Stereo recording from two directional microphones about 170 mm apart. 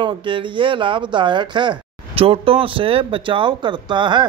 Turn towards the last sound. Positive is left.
turn(degrees=-25)  # may be behind; listen again after turning